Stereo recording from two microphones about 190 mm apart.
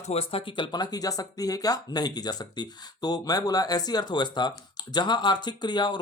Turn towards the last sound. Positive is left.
turn(degrees=25)  # may be behind; listen again after turning